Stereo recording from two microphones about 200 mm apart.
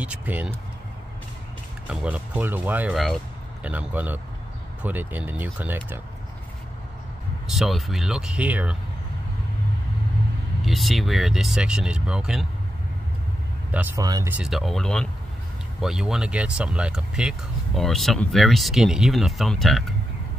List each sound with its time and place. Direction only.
0.0 s speech: 5° right (ahead or behind)
1.9 s speech: 5° right (ahead or behind)
7.4 s speech: centre (ahead or behind)
10.6 s speech: centre (ahead or behind)
13.7 s speech: 10° right (ahead or behind)
14.0 s speech: 20° right (ahead or behind)
14.3 s speech: centre (ahead or behind)